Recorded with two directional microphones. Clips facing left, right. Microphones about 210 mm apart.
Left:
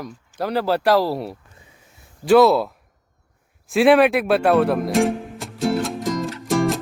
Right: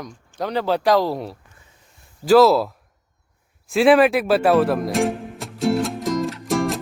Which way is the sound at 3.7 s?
Centre (ahead or behind).